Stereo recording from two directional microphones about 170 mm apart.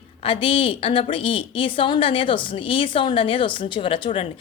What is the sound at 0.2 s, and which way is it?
A woman's voice, 30° left (ahead or behind).